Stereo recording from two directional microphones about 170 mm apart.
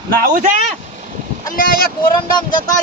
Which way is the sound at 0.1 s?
55° right (ahead or behind).